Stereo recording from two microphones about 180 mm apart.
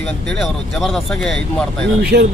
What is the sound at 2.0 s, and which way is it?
Speech, 60° right (ahead or behind).